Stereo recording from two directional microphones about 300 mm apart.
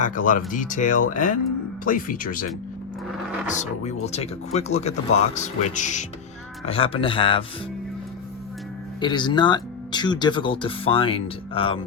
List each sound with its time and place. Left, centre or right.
0.0 s speech: left
9.0 s speech: centre